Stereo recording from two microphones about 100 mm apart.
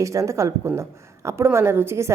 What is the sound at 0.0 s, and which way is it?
A woman's voice, 30° right (ahead or behind).